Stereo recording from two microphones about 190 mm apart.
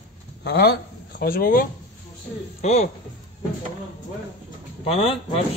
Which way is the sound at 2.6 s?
35° left (ahead or behind).